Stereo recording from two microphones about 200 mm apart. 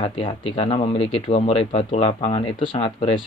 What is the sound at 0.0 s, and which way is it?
Speech, 25° left (ahead or behind).